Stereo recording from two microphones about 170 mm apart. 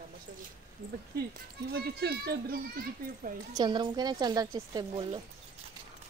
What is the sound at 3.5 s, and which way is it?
A woman's voice, 25° right (ahead or behind).